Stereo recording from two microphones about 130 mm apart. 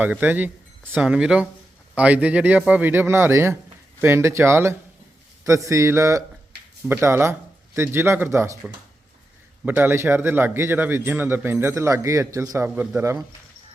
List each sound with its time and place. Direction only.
0.0 s a man's voice: 10° right (ahead or behind)
9.6 s a man's voice: 15° right (ahead or behind)